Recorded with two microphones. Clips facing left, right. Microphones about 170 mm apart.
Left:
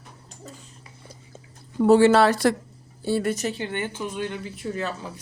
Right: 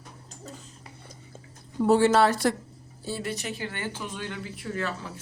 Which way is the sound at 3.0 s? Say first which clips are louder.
Left 9 dB; 60° left (ahead or behind).